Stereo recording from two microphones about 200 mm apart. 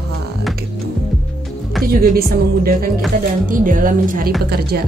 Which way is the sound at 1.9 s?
45° right (ahead or behind).